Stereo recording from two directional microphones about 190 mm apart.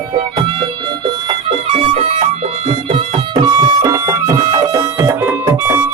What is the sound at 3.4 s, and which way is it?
Music, 20° right (ahead or behind).